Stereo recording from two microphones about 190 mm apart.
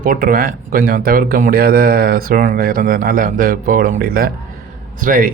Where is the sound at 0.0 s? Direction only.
45° right (ahead or behind).